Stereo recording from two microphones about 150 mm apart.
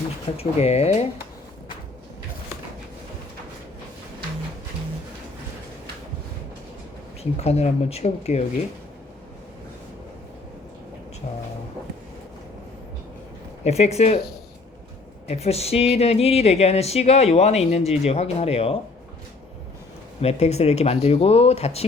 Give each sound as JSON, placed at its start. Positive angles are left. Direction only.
{"t": 0.3, "sound": "speech", "side_deg": 45}
{"t": 7.2, "sound": "speech", "side_deg": 45}
{"t": 13.7, "sound": "speech", "side_deg": 45}
{"t": 15.3, "sound": "speech", "side_deg": 45}
{"t": 20.2, "sound": "speech", "side_deg": 45}